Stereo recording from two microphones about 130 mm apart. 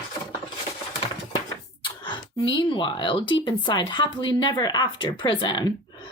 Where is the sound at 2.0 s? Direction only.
40° left (ahead or behind).